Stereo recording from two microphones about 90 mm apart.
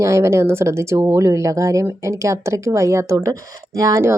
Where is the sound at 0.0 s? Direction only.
30° right (ahead or behind).